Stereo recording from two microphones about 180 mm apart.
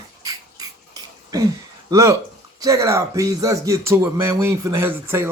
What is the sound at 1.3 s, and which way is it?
Speech, 20° right (ahead or behind).